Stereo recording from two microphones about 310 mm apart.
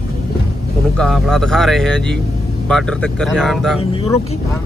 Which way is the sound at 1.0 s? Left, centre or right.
Centre.